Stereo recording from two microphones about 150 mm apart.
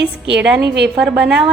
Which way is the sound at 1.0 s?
5° right (ahead or behind).